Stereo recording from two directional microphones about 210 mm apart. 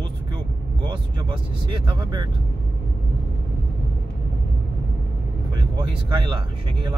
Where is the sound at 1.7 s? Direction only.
20° right (ahead or behind).